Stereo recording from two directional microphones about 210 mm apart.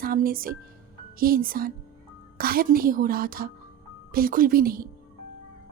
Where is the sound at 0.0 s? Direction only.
45° right (ahead or behind).